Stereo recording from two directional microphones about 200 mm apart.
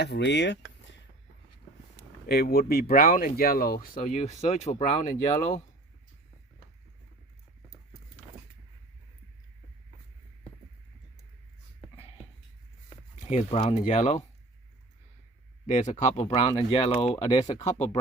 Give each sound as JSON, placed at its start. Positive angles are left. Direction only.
{"t": 0.0, "sound": "speech", "side_deg": 60}
{"t": 2.0, "sound": "speech", "side_deg": 50}
{"t": 13.3, "sound": "speech", "side_deg": 30}
{"t": 15.6, "sound": "speech", "side_deg": 35}